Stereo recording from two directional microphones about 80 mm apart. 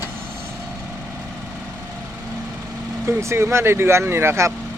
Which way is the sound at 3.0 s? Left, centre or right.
Right.